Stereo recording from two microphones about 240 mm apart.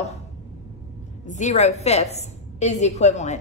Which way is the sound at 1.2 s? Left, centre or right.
Left.